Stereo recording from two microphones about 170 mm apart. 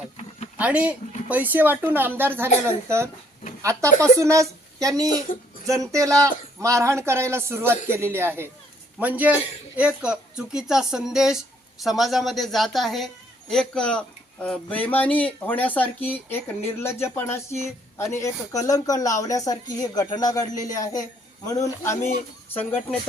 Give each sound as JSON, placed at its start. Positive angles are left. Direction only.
{"t": 0.5, "sound": "a man's voice", "side_deg": -5}
{"t": 5.3, "sound": "speech", "side_deg": 55}
{"t": 5.6, "sound": "a man's voice", "side_deg": -20}